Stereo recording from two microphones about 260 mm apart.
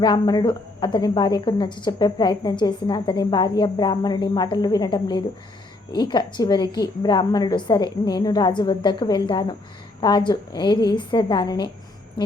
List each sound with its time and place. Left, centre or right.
0.0 s a woman's voice: centre